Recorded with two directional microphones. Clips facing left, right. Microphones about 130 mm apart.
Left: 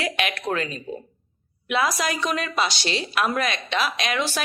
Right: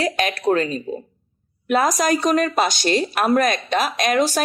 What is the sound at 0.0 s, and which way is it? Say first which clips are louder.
A woman's voice: right 6 dB; 35° right (ahead or behind).